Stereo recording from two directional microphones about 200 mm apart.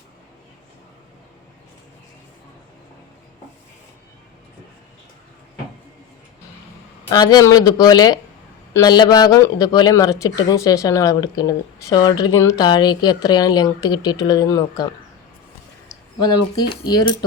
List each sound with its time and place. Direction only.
7.1 s speech: 20° left (ahead or behind)
16.2 s speech: 20° left (ahead or behind)